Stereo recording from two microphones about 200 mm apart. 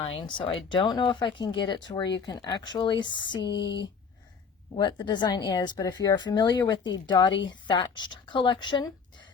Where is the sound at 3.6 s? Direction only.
60° left (ahead or behind).